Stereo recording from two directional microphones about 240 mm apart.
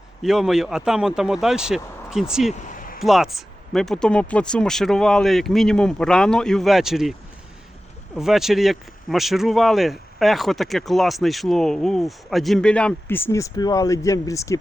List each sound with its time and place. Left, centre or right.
0.2 s speech: centre
2.5 s a sound: left
3.0 s speech: centre
8.1 s speech: centre